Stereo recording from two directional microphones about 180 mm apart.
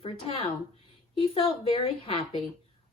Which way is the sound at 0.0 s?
30° left (ahead or behind).